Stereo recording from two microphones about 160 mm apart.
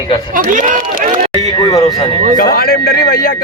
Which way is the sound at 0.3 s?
55° right (ahead or behind).